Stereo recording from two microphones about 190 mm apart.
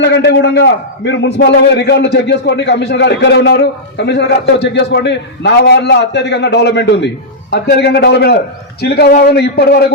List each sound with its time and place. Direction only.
0.0 s a man's voice: 70° left (ahead or behind)